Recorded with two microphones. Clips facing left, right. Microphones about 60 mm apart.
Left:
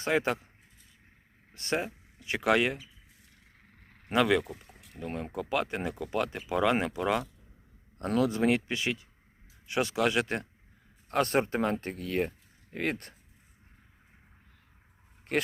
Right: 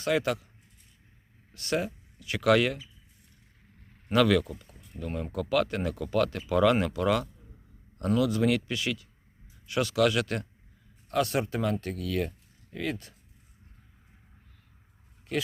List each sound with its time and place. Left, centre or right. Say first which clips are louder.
0.0 s speech: right 1 dB; left
1.5 s speech: right 2 dB; left
3.8 s a sound: even; left
4.1 s speech: right 2 dB; left
4.4 s speech: right 1 dB; left
4.9 s speech: right 2 dB; left
7.9 s speech: right 1 dB; left
11.1 s speech: left 1 dB; left
15.3 s speech: left 2 dB; left